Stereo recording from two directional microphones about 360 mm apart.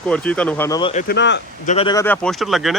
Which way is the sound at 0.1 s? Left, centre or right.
Centre.